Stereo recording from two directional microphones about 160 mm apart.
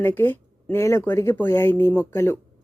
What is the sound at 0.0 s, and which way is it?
A woman's voice, 15° left (ahead or behind).